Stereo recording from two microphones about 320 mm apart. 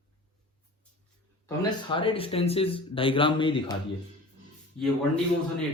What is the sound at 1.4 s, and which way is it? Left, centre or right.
A man's voice, centre.